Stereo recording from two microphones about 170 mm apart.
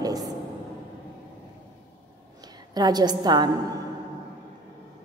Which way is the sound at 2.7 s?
25° right (ahead or behind).